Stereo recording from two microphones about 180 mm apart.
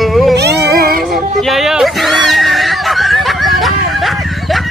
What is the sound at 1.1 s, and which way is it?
Neigh, centre (ahead or behind).